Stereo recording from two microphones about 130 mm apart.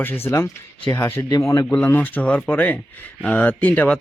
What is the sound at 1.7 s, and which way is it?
Speech, 10° left (ahead or behind).